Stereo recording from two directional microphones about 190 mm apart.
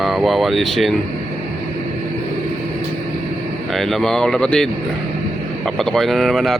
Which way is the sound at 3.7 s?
Centre (ahead or behind).